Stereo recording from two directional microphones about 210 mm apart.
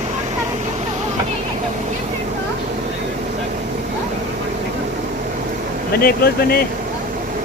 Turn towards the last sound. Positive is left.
turn(degrees=45)  # may be behind; listen again after turning